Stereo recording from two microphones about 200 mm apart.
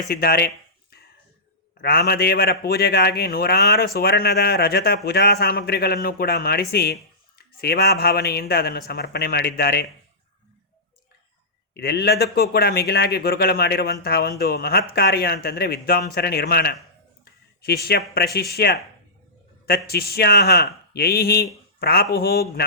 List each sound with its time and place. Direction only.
0.1 s speech: 50° left (ahead or behind)
11.7 s speech: 50° left (ahead or behind)